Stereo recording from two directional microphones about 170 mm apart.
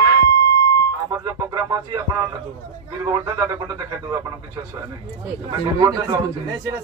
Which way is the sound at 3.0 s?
20° right (ahead or behind).